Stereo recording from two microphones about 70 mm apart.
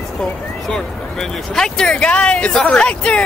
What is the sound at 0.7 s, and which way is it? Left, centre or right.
Speech, centre.